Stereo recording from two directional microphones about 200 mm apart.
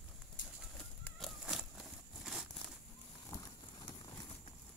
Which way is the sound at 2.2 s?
Centre (ahead or behind).